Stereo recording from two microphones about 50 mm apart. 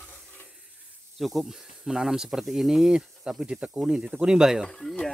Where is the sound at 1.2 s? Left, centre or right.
Centre.